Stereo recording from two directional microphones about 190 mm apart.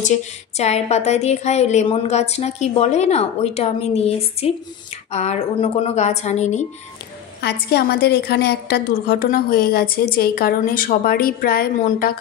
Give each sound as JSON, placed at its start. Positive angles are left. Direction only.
{"t": 0.0, "sound": "speech", "side_deg": 40}
{"t": 7.4, "sound": "a woman's voice", "side_deg": 60}